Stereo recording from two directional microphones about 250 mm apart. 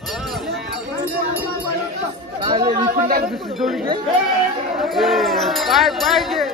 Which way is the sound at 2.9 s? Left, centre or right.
Right.